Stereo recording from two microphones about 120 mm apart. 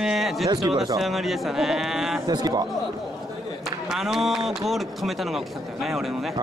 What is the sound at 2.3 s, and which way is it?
Speech, 30° right (ahead or behind).